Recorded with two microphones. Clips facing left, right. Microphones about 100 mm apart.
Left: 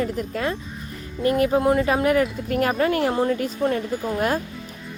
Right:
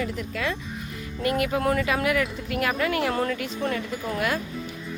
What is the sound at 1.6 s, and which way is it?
Speech, 20° left (ahead or behind).